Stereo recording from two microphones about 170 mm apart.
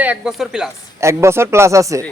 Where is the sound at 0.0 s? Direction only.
5° right (ahead or behind).